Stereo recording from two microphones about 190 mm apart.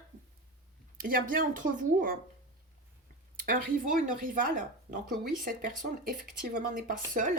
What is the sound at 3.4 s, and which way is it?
Speech, 50° right (ahead or behind).